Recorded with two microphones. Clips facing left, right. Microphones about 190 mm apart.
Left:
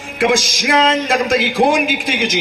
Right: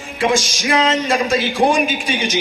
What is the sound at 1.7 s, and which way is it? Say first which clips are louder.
Speech: left 1 dB; 90° left.